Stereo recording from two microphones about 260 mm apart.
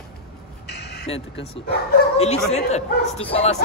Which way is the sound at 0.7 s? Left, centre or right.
Left.